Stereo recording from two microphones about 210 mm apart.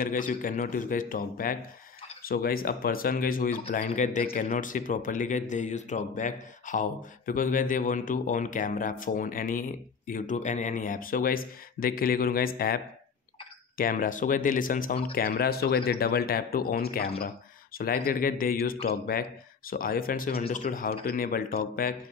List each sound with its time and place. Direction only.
0.0 s speech: 40° left (ahead or behind)